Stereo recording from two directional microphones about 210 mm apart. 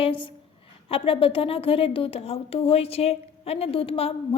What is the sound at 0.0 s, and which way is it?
A woman's voice, 25° left (ahead or behind).